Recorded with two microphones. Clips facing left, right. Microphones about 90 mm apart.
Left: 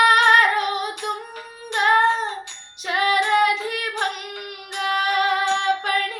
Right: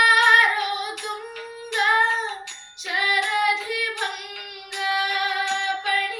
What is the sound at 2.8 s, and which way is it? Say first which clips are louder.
Music: left 4 dB; 45° left (ahead or behind).